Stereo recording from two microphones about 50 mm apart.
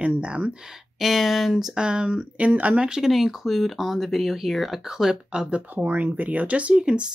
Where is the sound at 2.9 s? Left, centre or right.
Centre.